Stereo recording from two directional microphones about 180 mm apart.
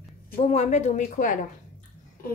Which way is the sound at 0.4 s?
35° left (ahead or behind).